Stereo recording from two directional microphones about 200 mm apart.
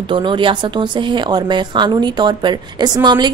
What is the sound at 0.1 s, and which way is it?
A woman's voice, 25° right (ahead or behind).